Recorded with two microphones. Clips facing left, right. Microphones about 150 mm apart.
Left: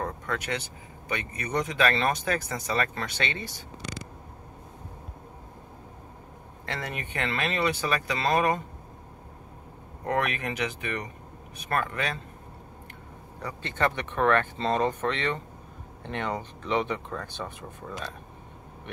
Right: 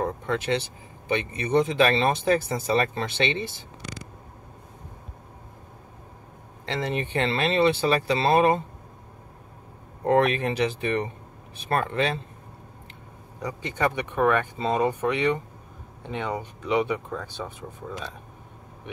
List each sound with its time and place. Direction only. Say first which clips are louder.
0.0 s speech: right 5 dB; 25° right (ahead or behind)
6.6 s speech: right 7 dB; 25° right (ahead or behind)
10.0 s speech: right 7 dB; 30° right (ahead or behind)
13.4 s speech: right 2 dB; 15° right (ahead or behind)